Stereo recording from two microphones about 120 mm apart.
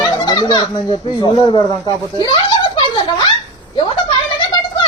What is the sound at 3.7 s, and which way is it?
Speech, 45° left (ahead or behind).